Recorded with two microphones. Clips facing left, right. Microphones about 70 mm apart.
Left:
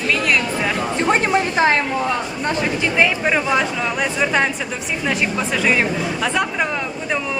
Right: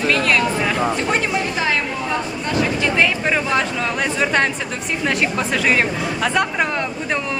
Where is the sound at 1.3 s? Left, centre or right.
Left.